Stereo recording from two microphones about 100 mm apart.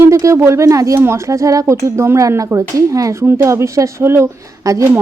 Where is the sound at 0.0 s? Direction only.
30° right (ahead or behind).